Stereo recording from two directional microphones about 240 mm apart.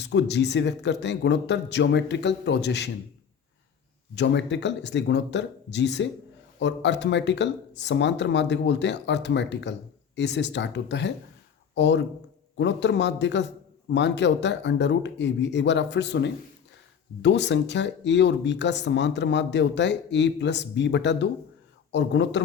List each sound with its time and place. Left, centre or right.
0.0 s speech: left
4.1 s speech: left